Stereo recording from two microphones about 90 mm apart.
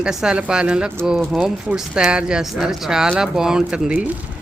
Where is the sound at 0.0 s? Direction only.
5° right (ahead or behind).